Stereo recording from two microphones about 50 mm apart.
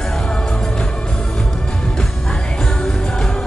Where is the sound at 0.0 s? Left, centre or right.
Centre.